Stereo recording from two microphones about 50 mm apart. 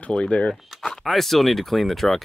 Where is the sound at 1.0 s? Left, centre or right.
Centre.